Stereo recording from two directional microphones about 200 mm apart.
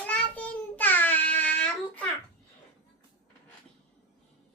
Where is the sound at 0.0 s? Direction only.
5° left (ahead or behind).